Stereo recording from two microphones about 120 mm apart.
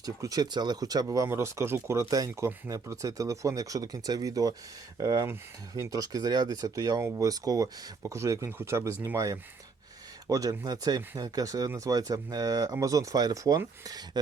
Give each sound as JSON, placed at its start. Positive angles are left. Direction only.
{"t": 0.0, "sound": "speech", "side_deg": -30}